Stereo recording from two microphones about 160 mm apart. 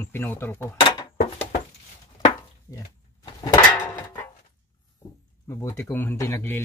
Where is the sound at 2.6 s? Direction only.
25° left (ahead or behind).